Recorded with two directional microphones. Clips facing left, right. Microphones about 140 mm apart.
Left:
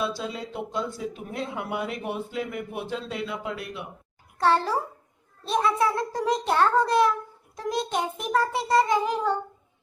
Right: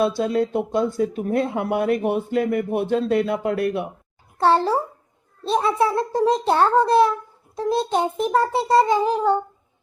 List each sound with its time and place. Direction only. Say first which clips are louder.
0.0 s speech: right 10 dB; 50° right (ahead or behind)
4.4 s a child's voice: right 5 dB; 30° right (ahead or behind)